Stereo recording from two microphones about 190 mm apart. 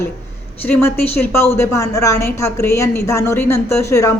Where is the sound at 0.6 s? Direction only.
10° left (ahead or behind).